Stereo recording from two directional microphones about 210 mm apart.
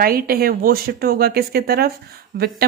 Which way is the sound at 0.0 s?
45° right (ahead or behind).